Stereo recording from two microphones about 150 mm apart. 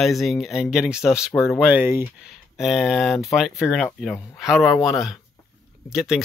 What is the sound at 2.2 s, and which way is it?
Speech, centre (ahead or behind).